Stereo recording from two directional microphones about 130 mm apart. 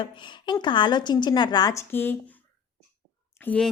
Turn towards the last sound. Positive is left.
turn(degrees=10)  # may be behind; listen again after turning